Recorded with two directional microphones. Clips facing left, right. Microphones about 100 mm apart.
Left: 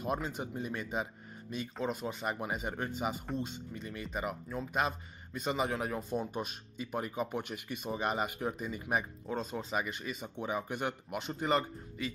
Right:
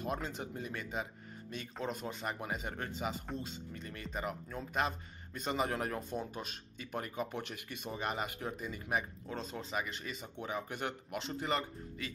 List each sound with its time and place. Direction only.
0.0 s speech: 15° left (ahead or behind)
1.8 s speech: 5° left (ahead or behind)
6.3 s speech: 15° left (ahead or behind)